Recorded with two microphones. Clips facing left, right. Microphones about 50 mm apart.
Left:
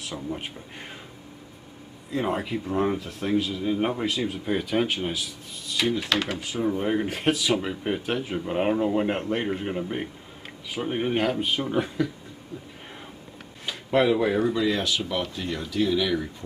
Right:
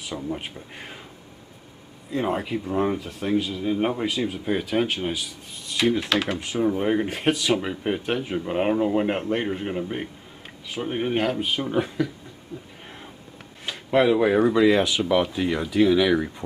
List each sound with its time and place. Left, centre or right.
0.0 s speech: centre
2.0 s speech: centre
13.7 s a sound: centre
14.5 s speech: centre